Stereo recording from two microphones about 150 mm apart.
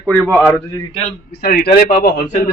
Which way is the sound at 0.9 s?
40° left (ahead or behind).